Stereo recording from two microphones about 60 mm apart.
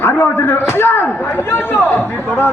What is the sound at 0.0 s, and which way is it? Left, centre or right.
A man's voice, left.